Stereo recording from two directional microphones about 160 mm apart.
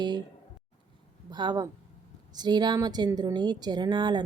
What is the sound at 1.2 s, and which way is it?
Speech, 25° right (ahead or behind).